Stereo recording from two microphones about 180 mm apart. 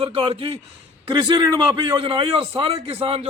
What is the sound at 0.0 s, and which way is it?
A man's voice, 30° right (ahead or behind).